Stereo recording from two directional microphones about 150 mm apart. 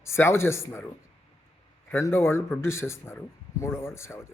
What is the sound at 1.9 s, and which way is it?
A man's voice, 15° left (ahead or behind).